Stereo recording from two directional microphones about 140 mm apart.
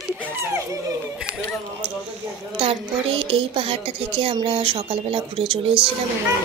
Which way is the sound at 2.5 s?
40° right (ahead or behind).